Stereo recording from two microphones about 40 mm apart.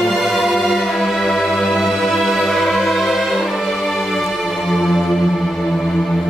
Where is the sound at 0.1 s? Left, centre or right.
Centre.